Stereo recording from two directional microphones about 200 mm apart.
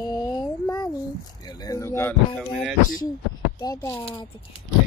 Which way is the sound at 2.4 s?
Centre (ahead or behind).